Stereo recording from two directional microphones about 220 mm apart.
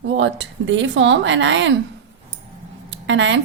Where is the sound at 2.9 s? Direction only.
55° right (ahead or behind).